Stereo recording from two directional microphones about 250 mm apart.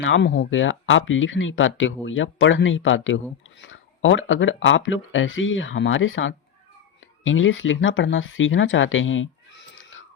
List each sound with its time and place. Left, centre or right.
0.0 s speech: left